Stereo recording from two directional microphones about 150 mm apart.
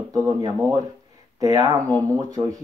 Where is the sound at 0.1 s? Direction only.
25° right (ahead or behind).